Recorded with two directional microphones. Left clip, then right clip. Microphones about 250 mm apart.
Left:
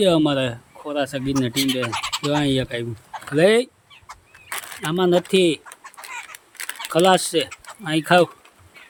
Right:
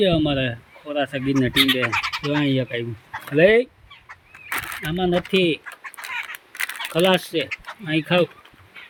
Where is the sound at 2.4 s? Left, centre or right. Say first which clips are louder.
Even; left.